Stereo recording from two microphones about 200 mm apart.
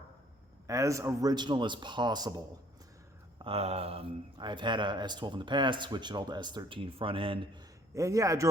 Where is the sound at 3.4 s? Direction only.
30° right (ahead or behind).